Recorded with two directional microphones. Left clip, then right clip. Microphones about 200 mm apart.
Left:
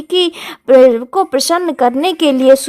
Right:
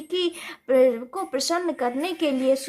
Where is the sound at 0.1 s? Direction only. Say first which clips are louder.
Left 12 dB; 50° left (ahead or behind).